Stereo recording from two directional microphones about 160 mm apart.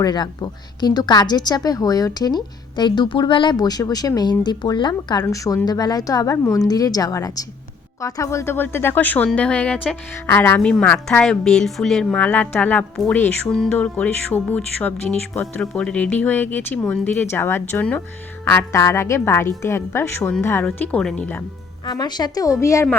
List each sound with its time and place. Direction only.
0.0 s a woman's voice: 25° left (ahead or behind); by 21.4 s 10° left (ahead or behind)
21.8 s a woman's voice: 25° left (ahead or behind)